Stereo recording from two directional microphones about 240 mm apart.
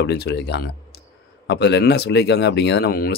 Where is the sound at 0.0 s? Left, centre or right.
Left.